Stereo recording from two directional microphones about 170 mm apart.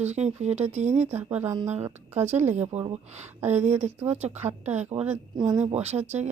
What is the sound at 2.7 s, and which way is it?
Speech, 40° right (ahead or behind).